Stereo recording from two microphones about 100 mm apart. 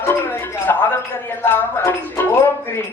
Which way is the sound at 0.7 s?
25° left (ahead or behind).